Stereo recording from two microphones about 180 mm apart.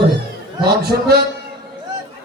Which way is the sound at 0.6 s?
65° right (ahead or behind).